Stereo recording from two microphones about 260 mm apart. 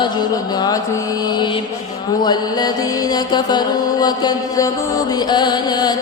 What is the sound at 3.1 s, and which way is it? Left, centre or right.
Mantra, centre.